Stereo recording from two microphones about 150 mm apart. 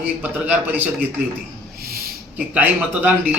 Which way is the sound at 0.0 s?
10° right (ahead or behind).